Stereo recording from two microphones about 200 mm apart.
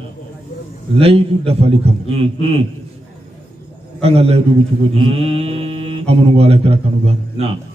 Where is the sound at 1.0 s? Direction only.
30° right (ahead or behind).